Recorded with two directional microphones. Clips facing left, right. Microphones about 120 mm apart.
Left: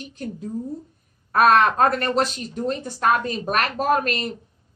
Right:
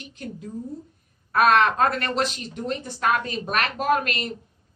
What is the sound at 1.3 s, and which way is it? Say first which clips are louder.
A woman's voice: left 2 dB; 40° left (ahead or behind).